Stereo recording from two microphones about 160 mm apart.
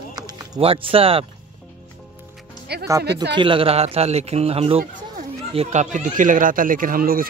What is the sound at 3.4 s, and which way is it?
Speech, 35° right (ahead or behind).